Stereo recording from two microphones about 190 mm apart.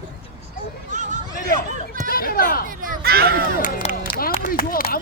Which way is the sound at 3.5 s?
50° left (ahead or behind).